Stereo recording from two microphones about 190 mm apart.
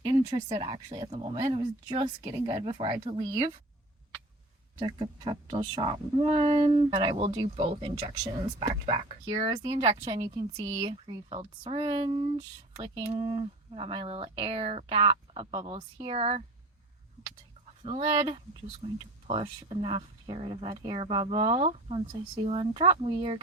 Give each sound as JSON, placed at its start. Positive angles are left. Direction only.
{"t": 0.0, "sound": "a woman's voice", "side_deg": -25}
{"t": 4.8, "sound": "a woman's voice", "side_deg": -25}
{"t": 17.8, "sound": "a woman's voice", "side_deg": -30}